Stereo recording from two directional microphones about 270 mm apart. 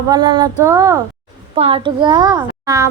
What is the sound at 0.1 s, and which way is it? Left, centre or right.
Speech, centre.